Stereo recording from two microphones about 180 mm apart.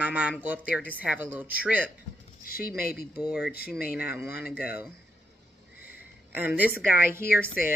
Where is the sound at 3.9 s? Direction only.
10° right (ahead or behind).